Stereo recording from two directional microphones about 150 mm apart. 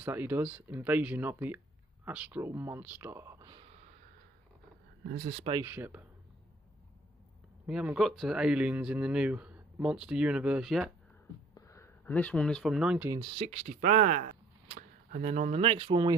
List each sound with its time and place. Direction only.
0.0 s speech: 15° right (ahead or behind)
5.1 s speech: 60° right (ahead or behind)
5.6 s speech: 15° right (ahead or behind)
7.6 s speech: 5° right (ahead or behind)
11.5 s speech: 20° left (ahead or behind); by 13.1 s 5° right (ahead or behind)
13.2 s speech: 45° right (ahead or behind)